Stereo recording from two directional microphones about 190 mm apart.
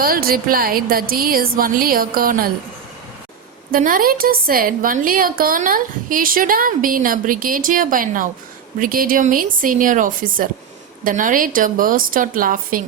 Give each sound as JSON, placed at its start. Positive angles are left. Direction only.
{"t": 0.0, "sound": "a woman's voice", "side_deg": -50}
{"t": 3.7, "sound": "a woman's voice", "side_deg": -45}